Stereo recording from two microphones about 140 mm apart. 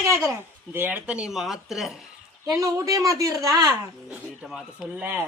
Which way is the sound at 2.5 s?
25° right (ahead or behind).